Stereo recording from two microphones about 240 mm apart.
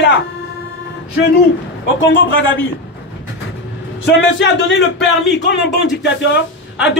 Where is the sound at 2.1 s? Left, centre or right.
Left.